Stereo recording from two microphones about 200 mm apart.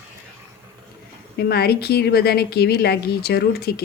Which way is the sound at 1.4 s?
50° left (ahead or behind).